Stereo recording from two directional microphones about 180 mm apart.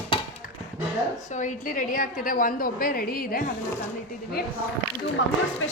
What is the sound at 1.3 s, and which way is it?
A woman's voice, 45° left (ahead or behind).